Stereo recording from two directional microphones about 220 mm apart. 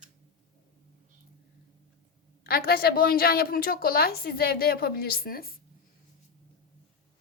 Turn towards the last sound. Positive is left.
turn(degrees=40)  # may be behind; listen again after turning